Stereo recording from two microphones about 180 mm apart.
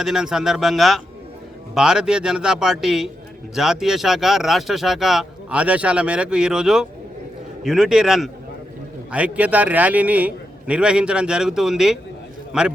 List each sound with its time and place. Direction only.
0.0 s a man's voice: 5° right (ahead or behind)